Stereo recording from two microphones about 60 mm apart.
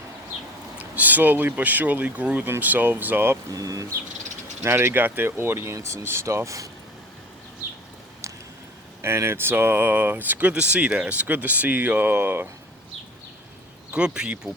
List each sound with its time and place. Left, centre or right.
0.9 s speech: right
3.5 s speech: right
4.6 s speech: right
5.7 s speech: right
6.0 s speech: right
9.0 s speech: right
10.5 s speech: centre; by 12.5 s right
13.9 s speech: centre